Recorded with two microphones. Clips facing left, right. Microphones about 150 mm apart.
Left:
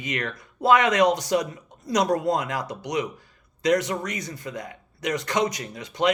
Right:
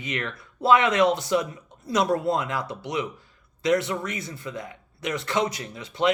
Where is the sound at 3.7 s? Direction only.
45° left (ahead or behind).